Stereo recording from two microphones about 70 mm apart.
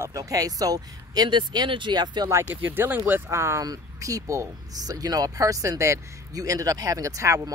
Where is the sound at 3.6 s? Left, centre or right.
Right.